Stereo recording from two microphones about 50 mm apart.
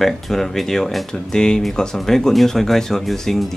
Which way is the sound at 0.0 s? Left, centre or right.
Centre.